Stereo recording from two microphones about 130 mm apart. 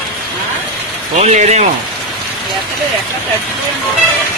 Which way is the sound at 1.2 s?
60° right (ahead or behind).